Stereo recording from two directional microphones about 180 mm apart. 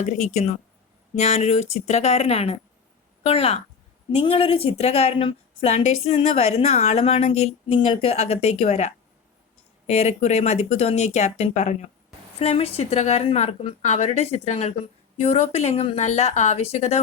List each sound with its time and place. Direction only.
0.0 s a woman's voice: 40° left (ahead or behind)